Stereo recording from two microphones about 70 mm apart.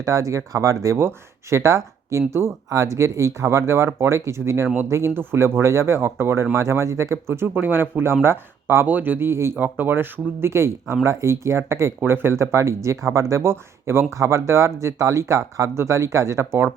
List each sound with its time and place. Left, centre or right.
0.0 s speech: right
7.5 s speech: right
9.6 s speech: right